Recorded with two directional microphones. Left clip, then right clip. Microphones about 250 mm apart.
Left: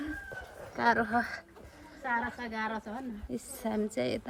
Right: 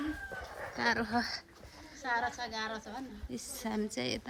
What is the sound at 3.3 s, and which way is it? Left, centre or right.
Speech, centre.